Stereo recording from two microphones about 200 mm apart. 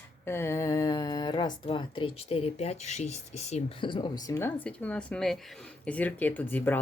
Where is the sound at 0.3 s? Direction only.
15° left (ahead or behind).